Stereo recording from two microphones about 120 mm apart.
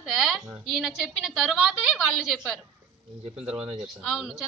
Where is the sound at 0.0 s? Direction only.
Centre (ahead or behind).